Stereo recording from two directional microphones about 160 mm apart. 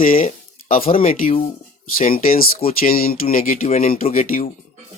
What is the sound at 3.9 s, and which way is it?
Speech, 60° left (ahead or behind).